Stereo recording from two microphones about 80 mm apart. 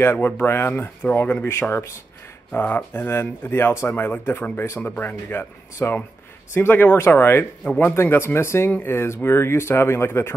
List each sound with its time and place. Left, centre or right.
0.0 s speech: left
7.6 s speech: centre
7.9 s speech: left